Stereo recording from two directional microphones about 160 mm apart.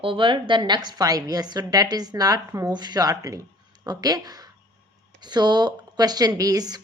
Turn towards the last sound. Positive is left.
turn(degrees=-25)  # may be behind; listen again after turning